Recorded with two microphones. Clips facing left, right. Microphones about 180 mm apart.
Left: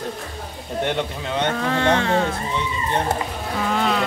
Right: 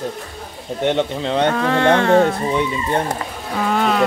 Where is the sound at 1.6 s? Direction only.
65° right (ahead or behind).